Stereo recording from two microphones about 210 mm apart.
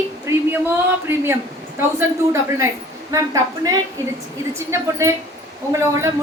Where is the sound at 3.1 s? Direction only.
15° right (ahead or behind).